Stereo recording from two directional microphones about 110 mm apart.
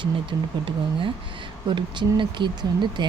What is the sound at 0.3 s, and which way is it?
Speech, 45° right (ahead or behind).